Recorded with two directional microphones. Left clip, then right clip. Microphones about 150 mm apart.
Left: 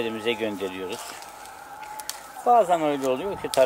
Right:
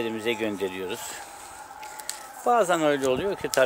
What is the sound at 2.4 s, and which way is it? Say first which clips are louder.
Speech: left 3 dB; 55° right (ahead or behind).